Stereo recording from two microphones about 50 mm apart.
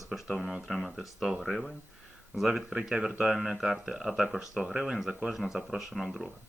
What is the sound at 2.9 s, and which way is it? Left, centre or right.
Speech, centre.